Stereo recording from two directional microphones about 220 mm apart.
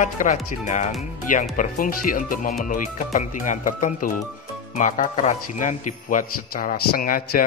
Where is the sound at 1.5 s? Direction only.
40° left (ahead or behind).